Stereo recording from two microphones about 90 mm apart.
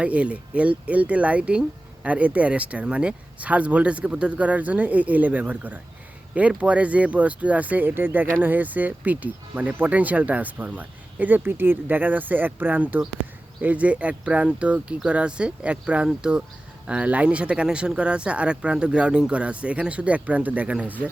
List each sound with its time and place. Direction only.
0.0 s speech: 15° right (ahead or behind)